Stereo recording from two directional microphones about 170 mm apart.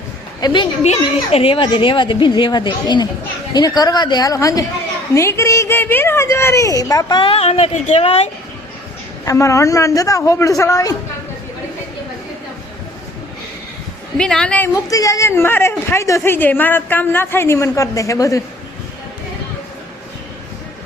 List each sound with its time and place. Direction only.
0.4 s a woman's voice: 25° left (ahead or behind)
9.2 s a woman's voice: 20° left (ahead or behind)
14.2 s a woman's voice: 5° left (ahead or behind)
14.8 s speech: 20° left (ahead or behind)